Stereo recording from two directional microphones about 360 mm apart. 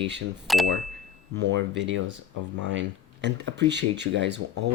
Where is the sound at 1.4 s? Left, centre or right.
Right.